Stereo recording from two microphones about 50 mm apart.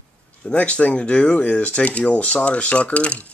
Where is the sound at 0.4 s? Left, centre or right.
Left.